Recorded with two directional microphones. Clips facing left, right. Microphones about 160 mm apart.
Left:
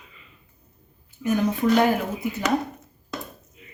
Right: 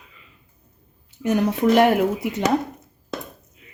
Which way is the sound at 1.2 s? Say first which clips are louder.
Right 2 dB; 70° right (ahead or behind).